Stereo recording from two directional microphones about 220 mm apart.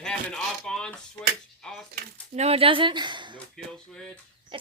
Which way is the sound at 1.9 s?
30° right (ahead or behind).